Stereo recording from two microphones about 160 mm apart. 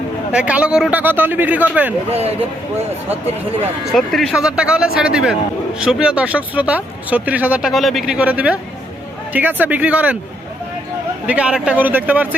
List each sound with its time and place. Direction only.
0.3 s speech: 10° right (ahead or behind)
2.0 s speech: 40° right (ahead or behind)
3.9 s speech: centre (ahead or behind)
11.3 s speech: 5° right (ahead or behind)